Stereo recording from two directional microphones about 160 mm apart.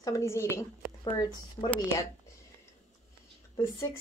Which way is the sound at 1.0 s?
25° left (ahead or behind).